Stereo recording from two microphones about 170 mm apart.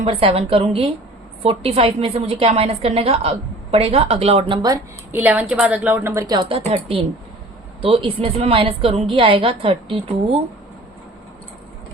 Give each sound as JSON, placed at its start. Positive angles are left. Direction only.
{"t": 0.0, "sound": "a woman's voice", "side_deg": -35}
{"t": 5.1, "sound": "a woman's voice", "side_deg": -10}